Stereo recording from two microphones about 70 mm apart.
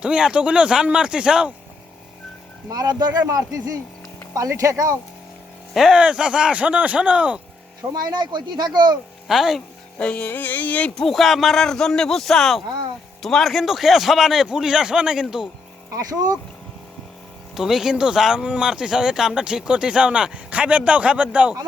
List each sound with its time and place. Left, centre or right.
0.0 s speech: centre
2.6 s speech: right
3.2 s speech: right
5.7 s speech: centre
8.1 s speech: right
9.2 s a man's voice: centre
10.0 s music: centre
10.9 s a man's voice: centre
17.5 s speech: centre